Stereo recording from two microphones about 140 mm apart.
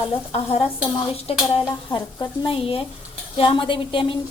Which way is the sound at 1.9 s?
35° left (ahead or behind).